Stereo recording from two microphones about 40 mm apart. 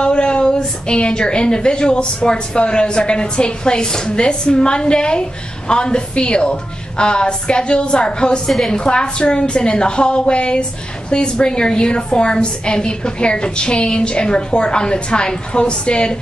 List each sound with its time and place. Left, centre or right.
0.0 s a woman's voice: left